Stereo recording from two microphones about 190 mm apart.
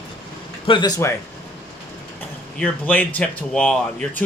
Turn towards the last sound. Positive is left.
turn(degrees=5)  # may be behind; listen again after turning